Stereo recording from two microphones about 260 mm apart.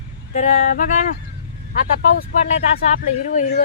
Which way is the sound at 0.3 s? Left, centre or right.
Left.